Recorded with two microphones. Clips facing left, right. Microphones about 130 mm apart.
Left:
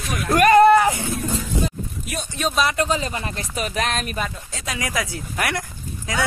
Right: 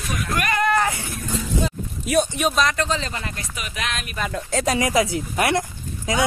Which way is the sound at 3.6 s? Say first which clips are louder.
Left 6 dB; 40° left (ahead or behind).